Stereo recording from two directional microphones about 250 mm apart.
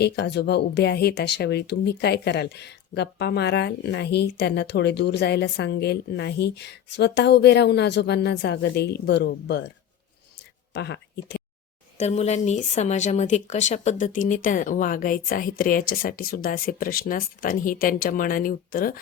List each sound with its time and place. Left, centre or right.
0.0 s speech: left
10.8 s speech: left
11.9 s a woman's voice: left